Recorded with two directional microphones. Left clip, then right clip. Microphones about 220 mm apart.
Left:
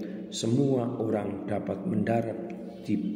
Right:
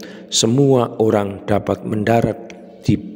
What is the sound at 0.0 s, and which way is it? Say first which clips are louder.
A man's voice: right 14 dB; 50° right (ahead or behind).